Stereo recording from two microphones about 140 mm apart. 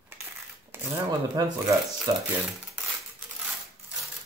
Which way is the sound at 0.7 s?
15° right (ahead or behind).